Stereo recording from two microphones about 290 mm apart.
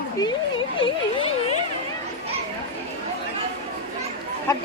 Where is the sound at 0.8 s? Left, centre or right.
Centre.